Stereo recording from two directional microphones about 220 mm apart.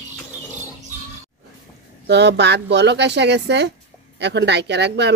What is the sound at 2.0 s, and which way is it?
Speech, 50° right (ahead or behind).